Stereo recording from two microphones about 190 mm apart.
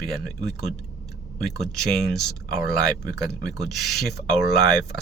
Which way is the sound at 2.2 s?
Centre (ahead or behind).